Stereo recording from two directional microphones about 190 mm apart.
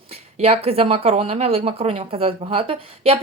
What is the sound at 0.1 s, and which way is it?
A woman's voice, 35° right (ahead or behind).